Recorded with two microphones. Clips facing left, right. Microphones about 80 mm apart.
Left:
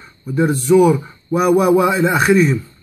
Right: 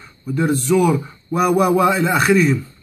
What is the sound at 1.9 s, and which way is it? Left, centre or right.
Speech, centre.